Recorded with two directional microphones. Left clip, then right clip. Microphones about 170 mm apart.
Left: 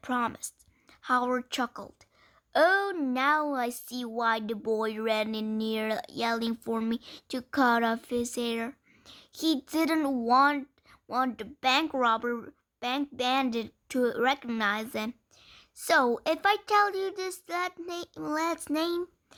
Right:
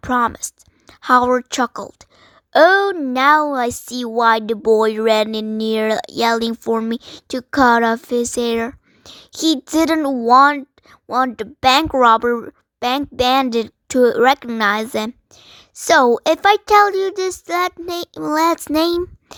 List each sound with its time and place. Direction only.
0.0 s a woman's voice: 45° right (ahead or behind)